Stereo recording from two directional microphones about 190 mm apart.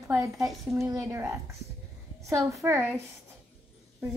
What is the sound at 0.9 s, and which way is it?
A woman's voice, 15° right (ahead or behind).